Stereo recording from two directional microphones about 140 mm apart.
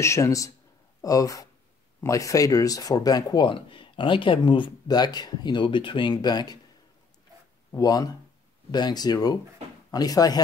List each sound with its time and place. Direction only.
0.0 s speech: 20° left (ahead or behind)
7.7 s speech: 25° left (ahead or behind)